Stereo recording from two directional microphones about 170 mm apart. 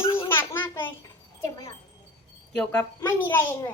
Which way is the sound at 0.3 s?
15° left (ahead or behind).